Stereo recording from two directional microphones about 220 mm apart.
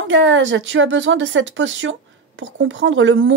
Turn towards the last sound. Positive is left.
turn(degrees=-60)  # may be behind; listen again after turning